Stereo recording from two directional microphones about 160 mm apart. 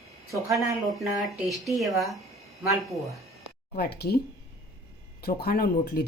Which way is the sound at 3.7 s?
80° left.